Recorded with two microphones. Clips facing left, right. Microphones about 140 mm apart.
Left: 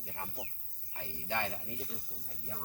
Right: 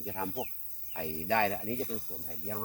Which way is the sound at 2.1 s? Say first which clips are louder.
Right 8 dB; 65° right (ahead or behind).